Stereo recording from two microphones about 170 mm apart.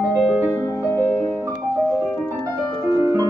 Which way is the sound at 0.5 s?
15° left (ahead or behind).